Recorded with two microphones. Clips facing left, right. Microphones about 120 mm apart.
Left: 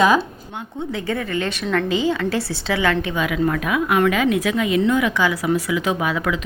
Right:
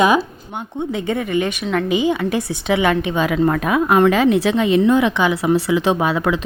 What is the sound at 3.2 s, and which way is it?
A woman's voice, 35° right (ahead or behind).